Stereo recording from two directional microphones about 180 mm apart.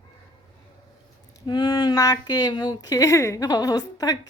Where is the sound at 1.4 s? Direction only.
25° left (ahead or behind).